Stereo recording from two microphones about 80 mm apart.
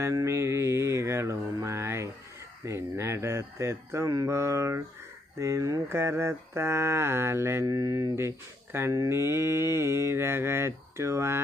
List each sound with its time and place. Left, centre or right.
0.0 s mantra: right
2.6 s speech: right
5.4 s mantra: right
7.6 s mantra: right